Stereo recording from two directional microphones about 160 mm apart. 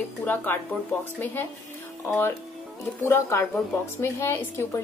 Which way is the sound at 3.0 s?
15° left (ahead or behind).